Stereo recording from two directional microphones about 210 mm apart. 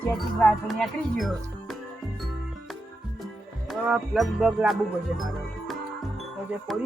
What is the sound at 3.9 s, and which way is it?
Speech, centre (ahead or behind).